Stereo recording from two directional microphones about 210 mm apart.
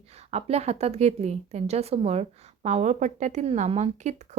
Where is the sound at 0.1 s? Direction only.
30° right (ahead or behind).